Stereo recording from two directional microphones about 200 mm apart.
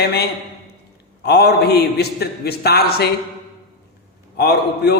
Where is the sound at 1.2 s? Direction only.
55° left (ahead or behind).